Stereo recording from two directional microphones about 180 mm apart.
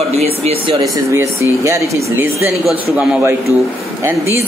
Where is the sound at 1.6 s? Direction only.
15° right (ahead or behind).